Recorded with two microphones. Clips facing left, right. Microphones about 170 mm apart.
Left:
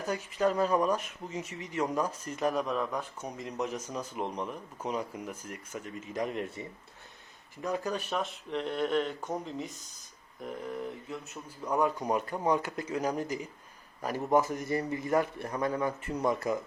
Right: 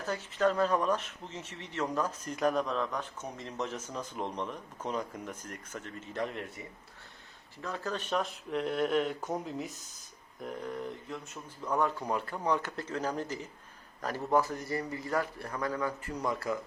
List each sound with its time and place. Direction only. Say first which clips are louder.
0.0 s a man's voice: even; 15° left (ahead or behind)
7.6 s a man's voice: left 4 dB; 15° left (ahead or behind)
8.1 s a man's voice: right 1 dB; centre (ahead or behind); by 16.6 s 20° left (ahead or behind)